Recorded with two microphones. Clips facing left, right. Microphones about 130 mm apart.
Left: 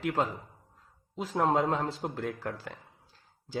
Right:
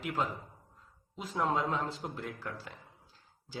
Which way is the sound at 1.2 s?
80° left.